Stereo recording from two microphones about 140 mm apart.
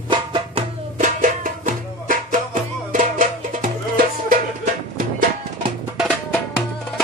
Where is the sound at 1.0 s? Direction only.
70° right (ahead or behind).